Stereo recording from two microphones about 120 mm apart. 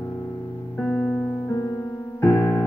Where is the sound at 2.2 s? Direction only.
20° left (ahead or behind).